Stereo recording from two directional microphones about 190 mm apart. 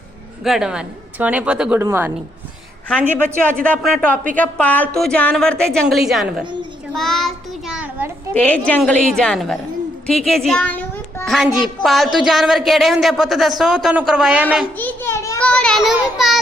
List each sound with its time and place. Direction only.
0.4 s a woman's voice: centre (ahead or behind)
3.4 s a woman's voice: 5° left (ahead or behind)
6.4 s a child's voice: 25° right (ahead or behind)
6.9 s a woman's voice: centre (ahead or behind)
8.3 s a woman's voice: 10° left (ahead or behind)
14.8 s a child's voice: 10° left (ahead or behind)